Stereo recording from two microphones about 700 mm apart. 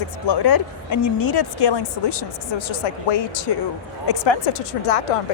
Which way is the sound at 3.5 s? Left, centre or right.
Left.